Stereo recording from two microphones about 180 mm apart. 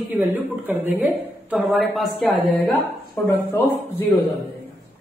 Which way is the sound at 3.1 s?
10° left (ahead or behind).